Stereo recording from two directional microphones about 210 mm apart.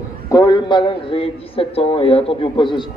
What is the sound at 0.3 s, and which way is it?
A man's voice, 15° left (ahead or behind).